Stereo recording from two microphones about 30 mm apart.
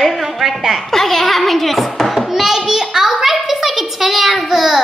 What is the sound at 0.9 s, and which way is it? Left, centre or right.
A child's voice, centre.